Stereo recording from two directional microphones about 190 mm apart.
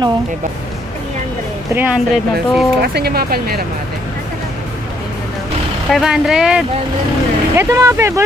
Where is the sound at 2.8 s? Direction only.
55° right (ahead or behind).